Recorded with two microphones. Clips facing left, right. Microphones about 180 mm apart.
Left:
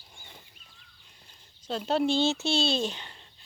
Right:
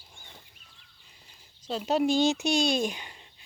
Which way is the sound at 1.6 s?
10° right (ahead or behind).